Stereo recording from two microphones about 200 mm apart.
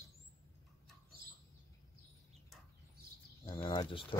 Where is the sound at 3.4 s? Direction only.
20° left (ahead or behind).